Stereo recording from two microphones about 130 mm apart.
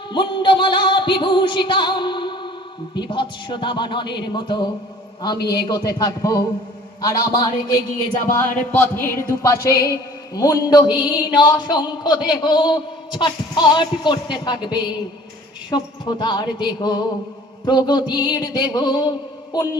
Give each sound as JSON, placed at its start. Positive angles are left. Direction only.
{"t": 0.1, "sound": "speech", "side_deg": 35}
{"t": 8.4, "sound": "a sound", "side_deg": 15}
{"t": 11.1, "sound": "speech", "side_deg": 35}